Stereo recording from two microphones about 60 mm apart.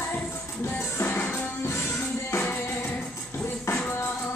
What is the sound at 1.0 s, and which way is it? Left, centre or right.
Music, left.